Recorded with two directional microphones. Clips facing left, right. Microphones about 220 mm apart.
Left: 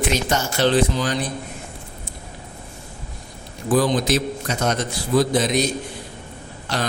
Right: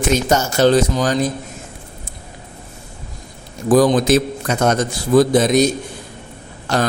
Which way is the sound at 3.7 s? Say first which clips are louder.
Right 6 dB; 45° right (ahead or behind).